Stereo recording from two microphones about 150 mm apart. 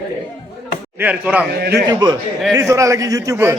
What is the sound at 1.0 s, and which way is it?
Speech, 10° right (ahead or behind).